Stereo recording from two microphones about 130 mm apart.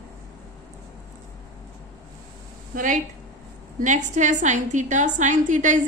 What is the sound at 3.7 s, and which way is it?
A woman's voice, 70° right (ahead or behind).